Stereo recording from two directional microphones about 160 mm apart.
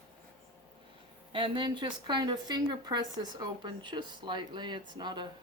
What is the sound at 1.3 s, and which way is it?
A woman's voice, 30° right (ahead or behind).